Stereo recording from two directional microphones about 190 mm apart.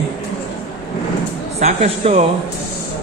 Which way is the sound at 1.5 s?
35° right (ahead or behind).